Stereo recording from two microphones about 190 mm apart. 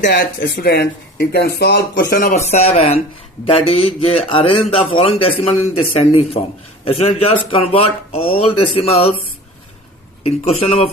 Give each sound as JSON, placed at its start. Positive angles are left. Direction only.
{"t": 0.0, "sound": "speech", "side_deg": 65}
{"t": 10.2, "sound": "speech", "side_deg": 35}